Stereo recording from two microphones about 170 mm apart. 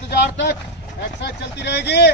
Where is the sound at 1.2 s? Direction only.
75° left (ahead or behind).